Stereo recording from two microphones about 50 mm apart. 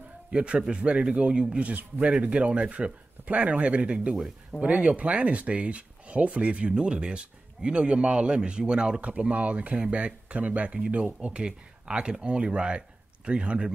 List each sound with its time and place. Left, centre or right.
0.3 s speech: right